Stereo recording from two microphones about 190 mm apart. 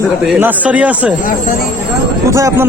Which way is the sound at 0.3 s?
10° right (ahead or behind).